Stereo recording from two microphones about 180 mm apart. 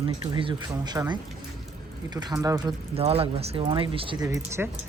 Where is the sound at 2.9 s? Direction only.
35° right (ahead or behind).